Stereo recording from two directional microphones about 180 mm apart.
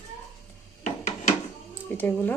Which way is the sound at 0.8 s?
45° left (ahead or behind).